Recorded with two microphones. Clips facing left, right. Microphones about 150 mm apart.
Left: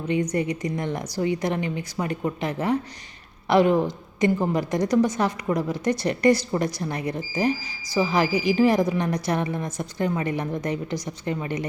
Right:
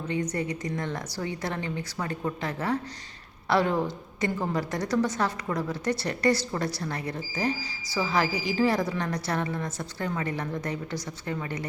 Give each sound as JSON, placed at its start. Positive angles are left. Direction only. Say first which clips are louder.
{"t": 0.1, "sound": "a woman's voice", "louder": "left 6 dB", "side_deg": 15}